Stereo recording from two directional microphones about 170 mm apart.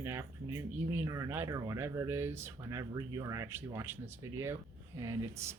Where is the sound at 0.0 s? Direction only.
15° right (ahead or behind).